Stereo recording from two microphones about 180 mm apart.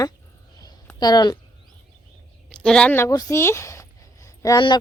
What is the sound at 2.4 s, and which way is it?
A woman's voice, 5° left (ahead or behind).